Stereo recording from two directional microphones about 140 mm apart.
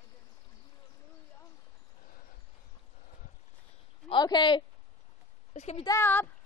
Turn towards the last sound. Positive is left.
turn(degrees=15)  # may be behind; listen again after turning